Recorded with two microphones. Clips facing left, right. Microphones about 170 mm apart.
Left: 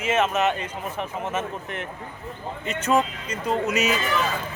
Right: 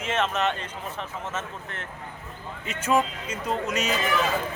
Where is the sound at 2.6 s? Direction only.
5° right (ahead or behind).